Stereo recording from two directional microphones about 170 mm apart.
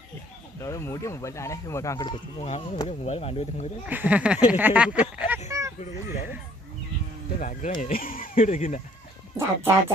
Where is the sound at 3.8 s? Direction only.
10° right (ahead or behind).